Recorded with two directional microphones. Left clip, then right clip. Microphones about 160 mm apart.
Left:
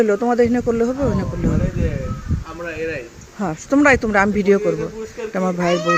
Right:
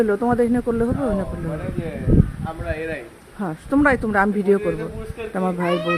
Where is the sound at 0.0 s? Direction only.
Centre (ahead or behind).